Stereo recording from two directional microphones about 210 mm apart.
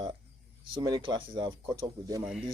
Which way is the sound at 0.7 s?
20° right (ahead or behind).